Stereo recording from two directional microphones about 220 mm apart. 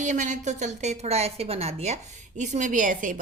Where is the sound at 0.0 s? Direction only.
35° right (ahead or behind).